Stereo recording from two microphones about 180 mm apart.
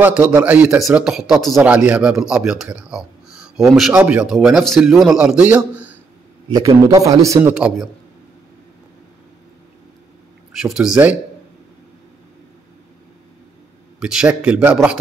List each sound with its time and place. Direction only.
0.0 s speech: 10° right (ahead or behind)
6.5 s a man's voice: 20° right (ahead or behind)
10.5 s speech: 5° right (ahead or behind)
13.9 s speech: 5° right (ahead or behind)